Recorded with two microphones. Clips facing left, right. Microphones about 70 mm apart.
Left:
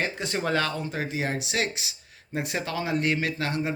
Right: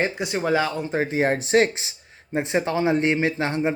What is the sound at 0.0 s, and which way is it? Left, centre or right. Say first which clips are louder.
Speech: right 4 dB; centre.